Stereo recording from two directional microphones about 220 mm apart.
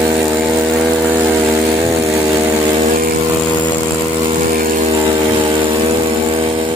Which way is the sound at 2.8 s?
40° right (ahead or behind).